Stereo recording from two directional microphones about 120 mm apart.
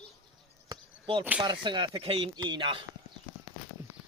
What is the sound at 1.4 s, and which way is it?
Speech, 40° right (ahead or behind).